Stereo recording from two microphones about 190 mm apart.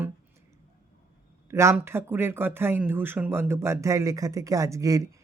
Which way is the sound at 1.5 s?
15° right (ahead or behind).